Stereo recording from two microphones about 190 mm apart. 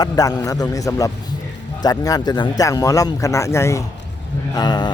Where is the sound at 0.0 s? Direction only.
20° left (ahead or behind).